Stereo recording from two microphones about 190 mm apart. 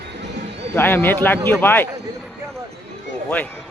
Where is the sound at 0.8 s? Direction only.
10° left (ahead or behind).